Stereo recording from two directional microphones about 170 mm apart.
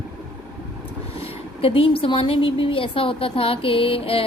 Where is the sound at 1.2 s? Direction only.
35° left (ahead or behind).